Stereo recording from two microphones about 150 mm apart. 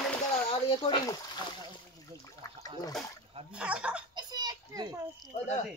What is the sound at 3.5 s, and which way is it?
Speech, 5° right (ahead or behind).